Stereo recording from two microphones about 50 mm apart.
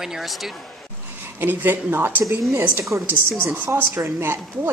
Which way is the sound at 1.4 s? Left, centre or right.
Right.